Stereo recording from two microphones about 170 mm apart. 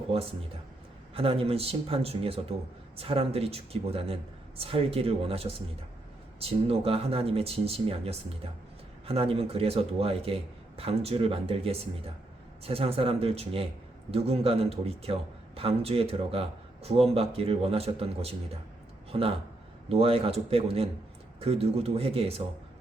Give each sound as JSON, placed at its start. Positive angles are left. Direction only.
{"t": 0.1, "sound": "a man's voice", "side_deg": -35}